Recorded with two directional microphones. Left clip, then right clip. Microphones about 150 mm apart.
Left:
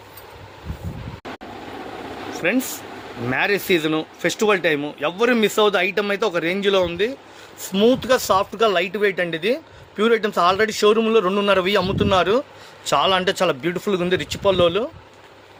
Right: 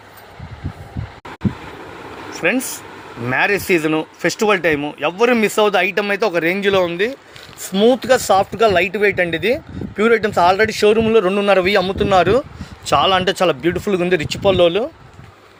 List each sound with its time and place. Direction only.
2.3 s air conditioning: 30° right (ahead or behind)
3.2 s a man's voice: 35° right (ahead or behind)